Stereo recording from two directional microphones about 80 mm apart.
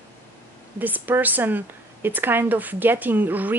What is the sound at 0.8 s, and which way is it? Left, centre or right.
Speech, right.